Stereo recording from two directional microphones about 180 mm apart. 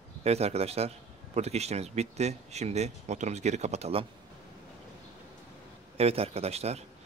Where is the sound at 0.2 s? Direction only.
35° right (ahead or behind).